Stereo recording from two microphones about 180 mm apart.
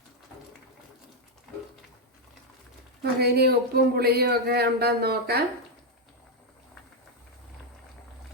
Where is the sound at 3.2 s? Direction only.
60° right (ahead or behind).